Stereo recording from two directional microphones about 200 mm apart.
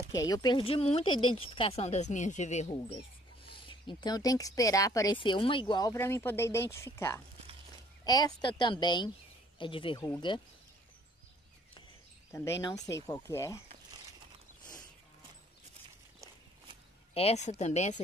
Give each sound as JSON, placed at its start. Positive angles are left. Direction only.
{"t": 0.1, "sound": "speech", "side_deg": 20}
{"t": 12.3, "sound": "speech", "side_deg": 15}
{"t": 17.1, "sound": "speech", "side_deg": 30}